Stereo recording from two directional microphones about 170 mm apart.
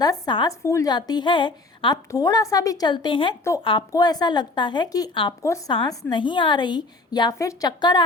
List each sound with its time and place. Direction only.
0.0 s a woman's voice: 25° left (ahead or behind)